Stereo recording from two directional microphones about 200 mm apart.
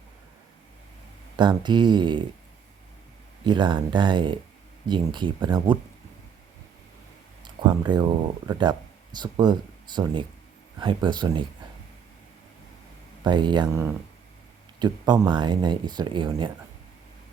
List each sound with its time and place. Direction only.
1.4 s speech: 20° right (ahead or behind)
3.4 s speech: 25° right (ahead or behind)
7.4 s speech: 20° right (ahead or behind)
13.2 s speech: 20° right (ahead or behind)
13.7 s speech: 10° right (ahead or behind)